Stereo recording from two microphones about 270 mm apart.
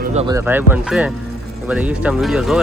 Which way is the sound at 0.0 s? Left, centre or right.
Right.